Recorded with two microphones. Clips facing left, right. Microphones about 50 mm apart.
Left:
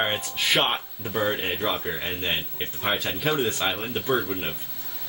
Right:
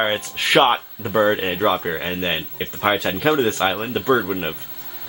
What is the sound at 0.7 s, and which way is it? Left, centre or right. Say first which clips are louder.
Speech: right 8 dB; right.